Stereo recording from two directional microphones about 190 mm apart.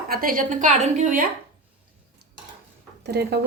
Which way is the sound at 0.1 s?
50° right (ahead or behind).